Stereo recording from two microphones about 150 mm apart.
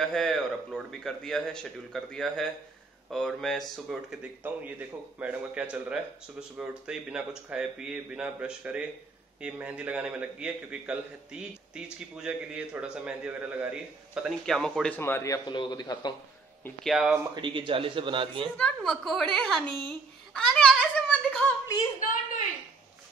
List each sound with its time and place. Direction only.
0.0 s a man's voice: 5° left (ahead or behind)
14.4 s a man's voice: 5° left (ahead or behind)
15.0 s a man's voice: 15° left (ahead or behind)
16.8 s a man's voice: 5° right (ahead or behind)
17.4 s a man's voice: 35° right (ahead or behind)
18.6 s a man's voice: 5° left (ahead or behind)
20.3 s a sound: 5° left (ahead or behind)